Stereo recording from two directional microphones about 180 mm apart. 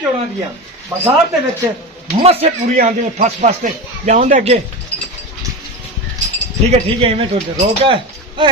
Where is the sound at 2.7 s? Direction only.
45° right (ahead or behind).